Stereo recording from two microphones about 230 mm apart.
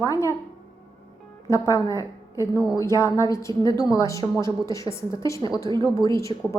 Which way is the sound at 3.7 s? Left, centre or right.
Centre.